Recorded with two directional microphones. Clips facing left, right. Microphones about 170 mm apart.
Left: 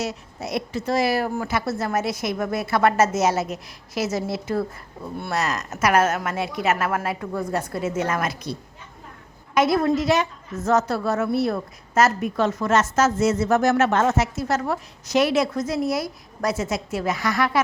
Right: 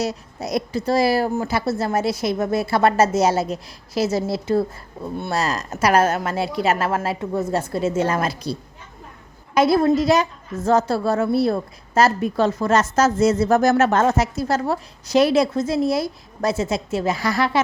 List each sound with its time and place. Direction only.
0.0 s a woman's voice: 35° right (ahead or behind)
9.6 s a woman's voice: 30° right (ahead or behind)